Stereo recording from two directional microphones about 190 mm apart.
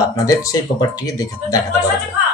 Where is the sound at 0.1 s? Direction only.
20° left (ahead or behind).